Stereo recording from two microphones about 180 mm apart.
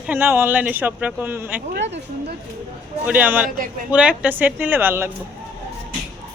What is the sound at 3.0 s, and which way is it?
Speech, 10° right (ahead or behind).